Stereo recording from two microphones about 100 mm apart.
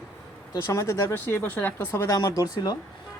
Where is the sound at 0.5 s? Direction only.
30° left (ahead or behind).